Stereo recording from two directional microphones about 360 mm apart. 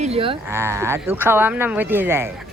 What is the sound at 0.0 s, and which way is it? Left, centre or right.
Speech, centre.